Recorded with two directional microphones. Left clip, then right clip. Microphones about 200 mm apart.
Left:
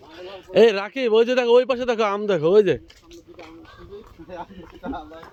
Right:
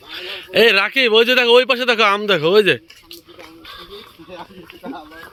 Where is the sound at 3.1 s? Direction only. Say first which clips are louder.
Right 4 dB; 25° right (ahead or behind).